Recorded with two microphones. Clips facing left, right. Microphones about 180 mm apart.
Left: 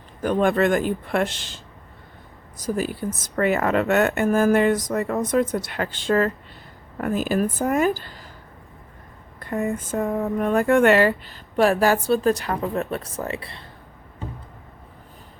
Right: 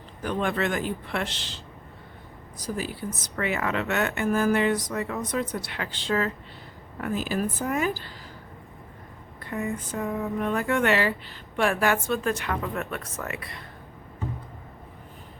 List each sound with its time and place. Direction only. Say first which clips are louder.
0.2 s speech: left 7 dB; 45° left (ahead or behind)
9.4 s speech: left 5 dB; 45° left (ahead or behind)
11.5 s speech: left 6 dB; 35° left (ahead or behind)